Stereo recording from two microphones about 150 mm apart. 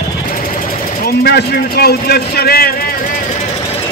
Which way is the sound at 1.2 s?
90° left.